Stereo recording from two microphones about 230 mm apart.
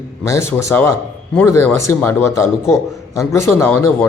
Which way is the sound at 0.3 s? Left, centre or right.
Centre.